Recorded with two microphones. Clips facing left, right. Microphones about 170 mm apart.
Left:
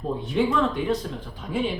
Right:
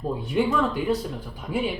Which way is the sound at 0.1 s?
10° right (ahead or behind).